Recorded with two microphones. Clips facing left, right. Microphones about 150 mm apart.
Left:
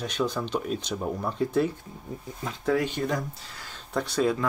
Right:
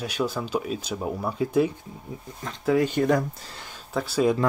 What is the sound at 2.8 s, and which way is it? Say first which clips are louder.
Speech: right 7 dB; 50° right (ahead or behind).